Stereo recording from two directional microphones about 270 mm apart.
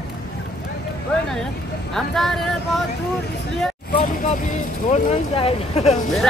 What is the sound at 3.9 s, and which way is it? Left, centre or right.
Speech, left.